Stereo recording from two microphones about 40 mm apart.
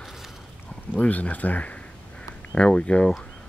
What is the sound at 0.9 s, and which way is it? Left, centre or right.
Speech, left.